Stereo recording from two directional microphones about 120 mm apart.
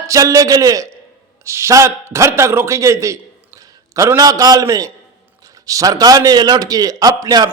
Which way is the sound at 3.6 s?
30° right (ahead or behind).